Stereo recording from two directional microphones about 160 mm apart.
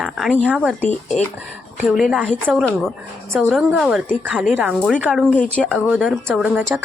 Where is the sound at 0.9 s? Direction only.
45° left (ahead or behind).